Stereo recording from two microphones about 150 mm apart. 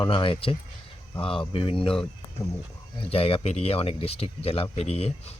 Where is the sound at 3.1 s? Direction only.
40° left (ahead or behind).